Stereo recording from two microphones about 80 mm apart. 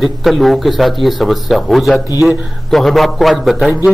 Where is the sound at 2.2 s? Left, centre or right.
Centre.